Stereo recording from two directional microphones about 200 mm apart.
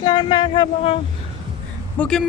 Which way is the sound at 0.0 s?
20° left (ahead or behind).